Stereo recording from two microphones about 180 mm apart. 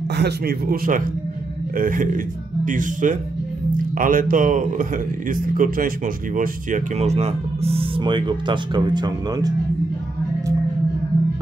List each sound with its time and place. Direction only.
0.1 s speech: 65° right (ahead or behind); by 9.5 s 25° right (ahead or behind)